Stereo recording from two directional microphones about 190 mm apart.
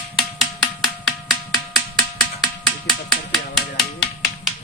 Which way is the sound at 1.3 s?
20° left (ahead or behind).